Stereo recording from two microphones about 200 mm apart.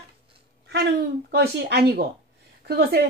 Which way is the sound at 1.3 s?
55° right (ahead or behind).